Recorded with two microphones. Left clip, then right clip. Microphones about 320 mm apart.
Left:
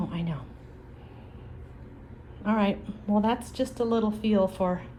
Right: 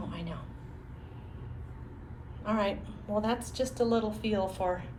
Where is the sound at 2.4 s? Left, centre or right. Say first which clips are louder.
Left 3 dB; left.